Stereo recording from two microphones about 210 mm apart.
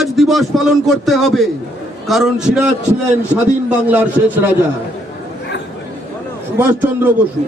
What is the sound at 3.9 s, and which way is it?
Speech, 5° right (ahead or behind).